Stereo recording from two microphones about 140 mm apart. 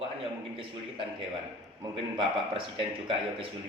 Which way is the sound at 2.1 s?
40° right (ahead or behind).